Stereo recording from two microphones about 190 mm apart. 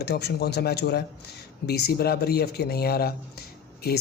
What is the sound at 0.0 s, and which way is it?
A man's voice, 60° left (ahead or behind).